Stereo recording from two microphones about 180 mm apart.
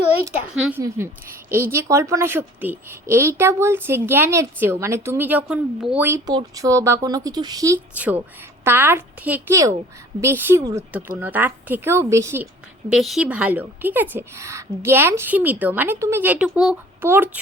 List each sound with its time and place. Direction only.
0.3 s a woman's voice: 15° right (ahead or behind)
6.2 s speech: 20° right (ahead or behind)
7.9 s a woman's voice: 10° right (ahead or behind)
12.9 s a woman's voice: centre (ahead or behind)